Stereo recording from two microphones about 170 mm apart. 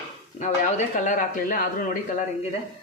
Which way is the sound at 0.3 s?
45° left (ahead or behind).